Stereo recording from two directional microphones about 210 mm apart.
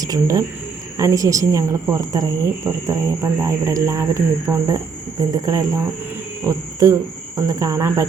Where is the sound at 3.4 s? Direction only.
15° right (ahead or behind).